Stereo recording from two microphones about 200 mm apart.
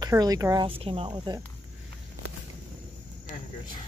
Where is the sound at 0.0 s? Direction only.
20° right (ahead or behind).